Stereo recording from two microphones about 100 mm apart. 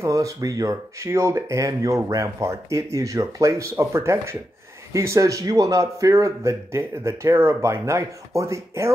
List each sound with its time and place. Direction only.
0.0 s a man's voice: 35° right (ahead or behind)